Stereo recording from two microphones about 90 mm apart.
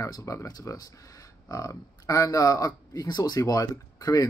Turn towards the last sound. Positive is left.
turn(degrees=40)  # may be behind; listen again after turning